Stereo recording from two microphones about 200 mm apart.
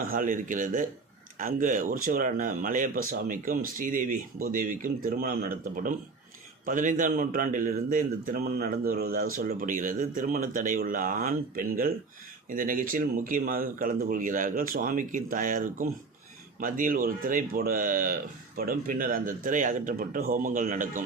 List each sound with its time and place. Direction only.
0.0 s a man's voice: 45° right (ahead or behind)